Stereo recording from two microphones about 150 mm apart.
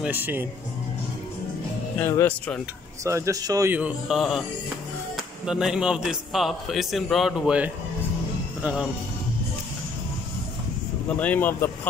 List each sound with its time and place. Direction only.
0.0 s speech: 10° right (ahead or behind)
2.0 s speech: 15° left (ahead or behind)
3.0 s speech: 20° right (ahead or behind)
3.7 s a man's voice: 5° right (ahead or behind)
11.1 s speech: 10° left (ahead or behind)